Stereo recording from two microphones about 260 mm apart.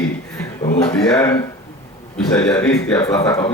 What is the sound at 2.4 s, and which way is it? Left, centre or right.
Speech, centre.